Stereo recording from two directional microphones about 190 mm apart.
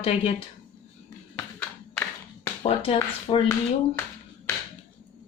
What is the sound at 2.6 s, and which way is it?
Speech, 30° left (ahead or behind).